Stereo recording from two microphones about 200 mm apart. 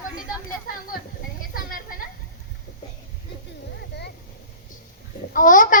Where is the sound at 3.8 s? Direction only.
55° left (ahead or behind).